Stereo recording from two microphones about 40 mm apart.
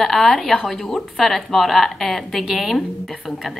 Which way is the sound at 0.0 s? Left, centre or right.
Centre.